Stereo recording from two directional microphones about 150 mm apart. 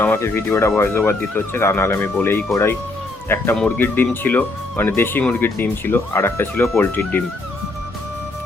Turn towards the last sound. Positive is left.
turn(degrees=15)  # may be behind; listen again after turning